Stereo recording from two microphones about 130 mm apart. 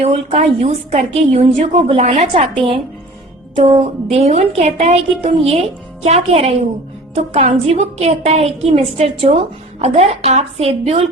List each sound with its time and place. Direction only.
0.0 s a woman's voice: 50° right (ahead or behind)